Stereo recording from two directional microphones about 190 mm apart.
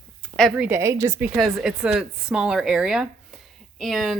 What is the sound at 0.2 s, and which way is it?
A woman's voice, centre (ahead or behind).